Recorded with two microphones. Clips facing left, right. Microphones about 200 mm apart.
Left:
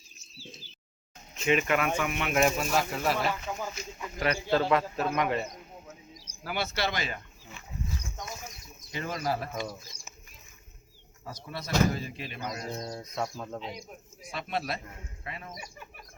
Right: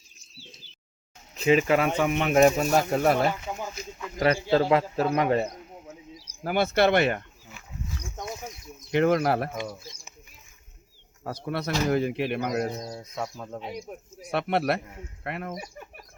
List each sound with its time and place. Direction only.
1.4 s speech: 30° right (ahead or behind); by 3.2 s 50° right (ahead or behind)
3.5 s a sound: 20° right (ahead or behind)
4.3 s speech: 25° right (ahead or behind)
5.1 s speech: 35° right (ahead or behind)
6.1 s speech: 55° right (ahead or behind)
8.9 s speech: 65° right (ahead or behind)
9.6 s speech: 20° right (ahead or behind)
11.2 s speech: 60° right (ahead or behind)
12.8 s speech: 5° right (ahead or behind)
13.6 s speech: 60° right (ahead or behind)